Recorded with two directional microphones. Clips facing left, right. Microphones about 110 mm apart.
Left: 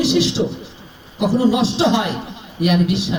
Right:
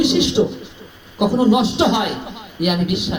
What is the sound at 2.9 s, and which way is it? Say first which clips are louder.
Music: left 1 dB; 30° left (ahead or behind).